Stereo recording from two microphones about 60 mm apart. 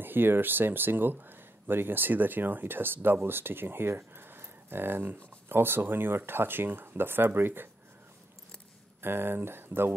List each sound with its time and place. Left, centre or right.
0.0 s speech: right
9.0 s speech: right